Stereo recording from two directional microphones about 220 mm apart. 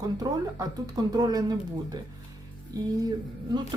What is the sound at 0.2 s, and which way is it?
Speech, 15° right (ahead or behind).